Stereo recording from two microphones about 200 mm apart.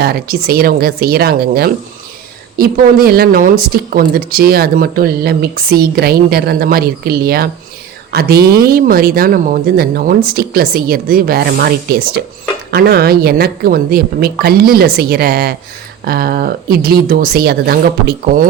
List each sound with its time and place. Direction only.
0.0 s a woman's voice: 50° right (ahead or behind)